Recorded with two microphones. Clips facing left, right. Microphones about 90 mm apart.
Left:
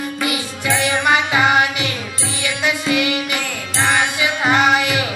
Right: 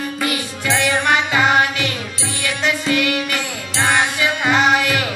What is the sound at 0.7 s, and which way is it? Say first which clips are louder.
Music: even; 20° left (ahead or behind).